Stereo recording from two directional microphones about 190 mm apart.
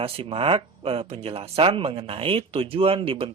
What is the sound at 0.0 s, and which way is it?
Speech, 30° right (ahead or behind).